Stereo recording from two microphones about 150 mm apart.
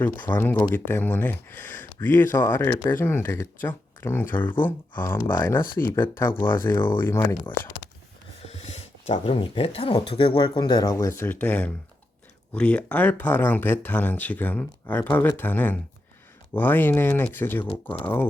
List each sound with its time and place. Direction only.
0.2 s speech: 15° left (ahead or behind)
8.4 s speech: 45° left (ahead or behind); by 18.3 s 10° left (ahead or behind)